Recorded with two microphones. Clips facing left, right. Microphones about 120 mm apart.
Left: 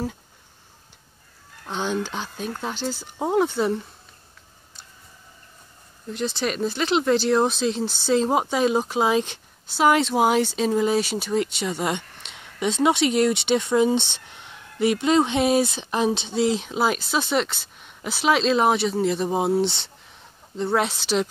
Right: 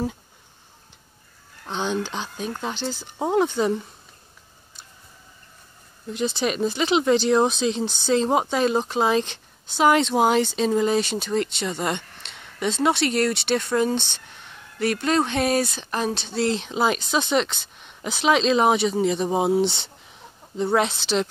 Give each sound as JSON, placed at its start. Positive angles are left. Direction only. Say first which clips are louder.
{"t": 1.7, "sound": "a woman's voice", "louder": "even", "side_deg": 5}
{"t": 6.1, "sound": "speech", "louder": "right 2 dB", "side_deg": 0}
{"t": 16.4, "sound": "a woman's voice", "louder": "right 1 dB", "side_deg": 5}